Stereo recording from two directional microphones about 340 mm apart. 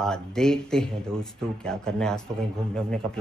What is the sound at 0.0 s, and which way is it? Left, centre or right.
Speech, centre.